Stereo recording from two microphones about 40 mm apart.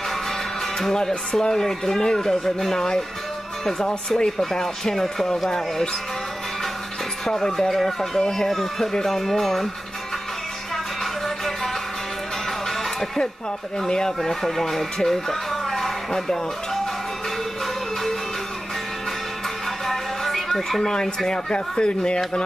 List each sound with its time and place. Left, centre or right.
0.9 s speech: centre
7.2 s speech: centre
11.2 s music: centre
13.7 s speech: centre
19.9 s a sound: centre
21.3 s speech: centre